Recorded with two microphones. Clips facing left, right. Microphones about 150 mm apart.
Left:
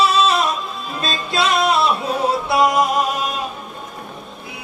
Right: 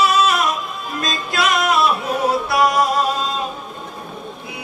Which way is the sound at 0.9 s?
30° left (ahead or behind).